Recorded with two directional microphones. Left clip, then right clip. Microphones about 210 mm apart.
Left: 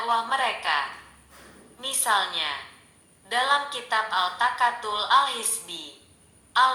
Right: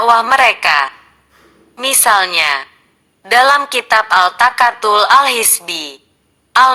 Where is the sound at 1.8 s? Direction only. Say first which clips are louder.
Right 13 dB; 30° right (ahead or behind).